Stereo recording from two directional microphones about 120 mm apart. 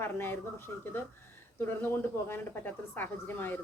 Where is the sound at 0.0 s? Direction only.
20° left (ahead or behind).